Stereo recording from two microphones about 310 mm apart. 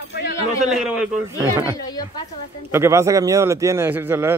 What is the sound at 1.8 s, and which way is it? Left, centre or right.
Speech, centre.